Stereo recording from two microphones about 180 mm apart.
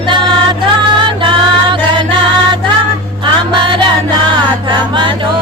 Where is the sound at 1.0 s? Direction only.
25° right (ahead or behind).